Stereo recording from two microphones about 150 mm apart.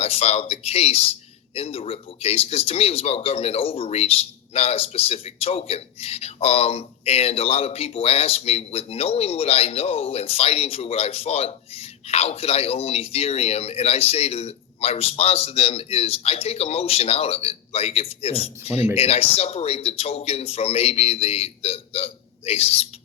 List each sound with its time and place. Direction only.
0.0 s speech: 45° left (ahead or behind)